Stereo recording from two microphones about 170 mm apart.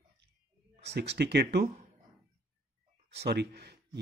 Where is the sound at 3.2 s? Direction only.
75° right (ahead or behind).